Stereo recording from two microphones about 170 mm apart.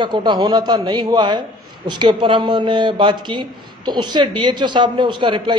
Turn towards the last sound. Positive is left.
turn(degrees=-30)  # may be behind; listen again after turning